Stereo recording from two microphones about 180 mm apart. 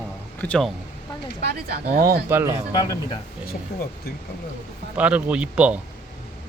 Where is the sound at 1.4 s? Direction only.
60° right (ahead or behind).